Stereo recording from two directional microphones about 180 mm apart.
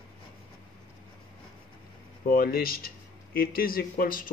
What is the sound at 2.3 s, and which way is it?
Speech, 55° left (ahead or behind).